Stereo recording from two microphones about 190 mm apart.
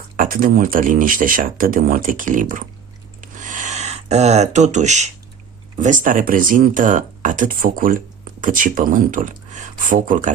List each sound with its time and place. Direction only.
0.2 s speech: 45° right (ahead or behind)
3.2 s a sound: 40° right (ahead or behind)
5.7 s speech: 40° right (ahead or behind)